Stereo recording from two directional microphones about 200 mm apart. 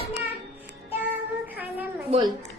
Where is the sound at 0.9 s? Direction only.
10° right (ahead or behind).